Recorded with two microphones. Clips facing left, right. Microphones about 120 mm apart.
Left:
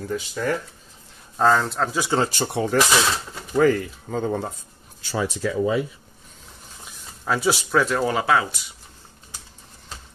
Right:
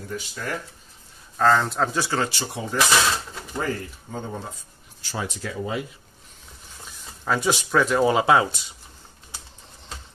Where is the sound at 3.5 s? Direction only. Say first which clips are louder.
Left 10 dB; 90° left.